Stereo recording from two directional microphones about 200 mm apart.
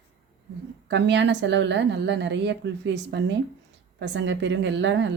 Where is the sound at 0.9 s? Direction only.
60° right (ahead or behind).